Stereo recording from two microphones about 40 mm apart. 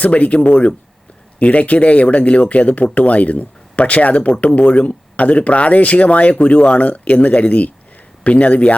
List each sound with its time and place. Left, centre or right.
0.0 s speech: left